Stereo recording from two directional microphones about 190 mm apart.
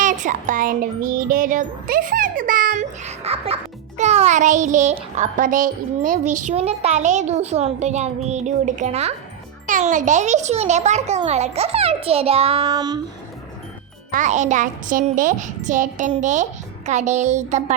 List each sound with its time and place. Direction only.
0.0 s music: 40° right (ahead or behind); by 13.0 s 20° right (ahead or behind)
14.1 s music: 40° right (ahead or behind)